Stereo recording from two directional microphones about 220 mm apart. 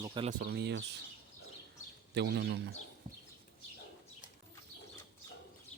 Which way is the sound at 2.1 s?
50° right (ahead or behind).